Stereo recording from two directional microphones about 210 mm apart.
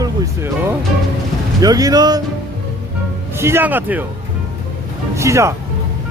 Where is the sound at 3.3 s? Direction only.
10° right (ahead or behind).